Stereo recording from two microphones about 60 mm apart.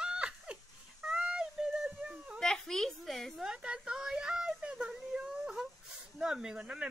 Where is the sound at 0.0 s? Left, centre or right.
Centre.